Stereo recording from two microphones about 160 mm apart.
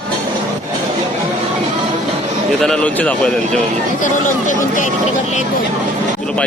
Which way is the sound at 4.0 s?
55° left (ahead or behind).